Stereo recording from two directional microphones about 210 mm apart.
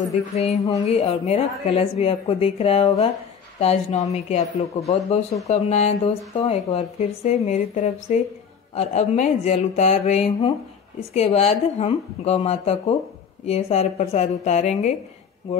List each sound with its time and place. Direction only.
0.0 s speech: 30° left (ahead or behind)
0.6 s a sound: 15° left (ahead or behind)
0.8 s speech: 30° left (ahead or behind)